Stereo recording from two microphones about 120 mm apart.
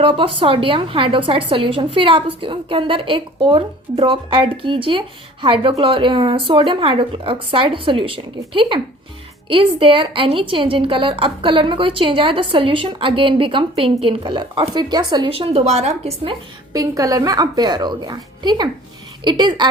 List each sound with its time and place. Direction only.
0.0 s a woman's voice: 45° right (ahead or behind)
15.3 s a woman's voice: 55° right (ahead or behind)
16.7 s a woman's voice: 30° right (ahead or behind)